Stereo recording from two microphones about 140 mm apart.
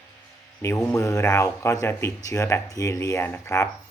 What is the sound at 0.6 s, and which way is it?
Speech, 20° left (ahead or behind).